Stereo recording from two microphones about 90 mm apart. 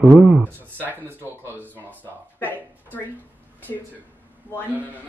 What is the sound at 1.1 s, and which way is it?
Speech, 20° left (ahead or behind).